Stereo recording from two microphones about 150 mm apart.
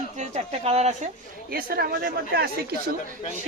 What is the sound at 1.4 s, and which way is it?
Speech, 85° right.